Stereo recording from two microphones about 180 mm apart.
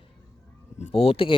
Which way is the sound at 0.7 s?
35° left (ahead or behind).